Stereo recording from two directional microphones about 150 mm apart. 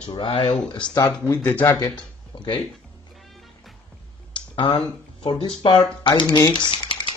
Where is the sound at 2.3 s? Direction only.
30° left (ahead or behind).